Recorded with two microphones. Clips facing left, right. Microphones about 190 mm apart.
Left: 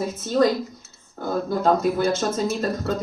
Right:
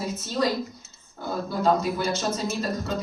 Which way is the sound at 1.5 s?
50° left (ahead or behind).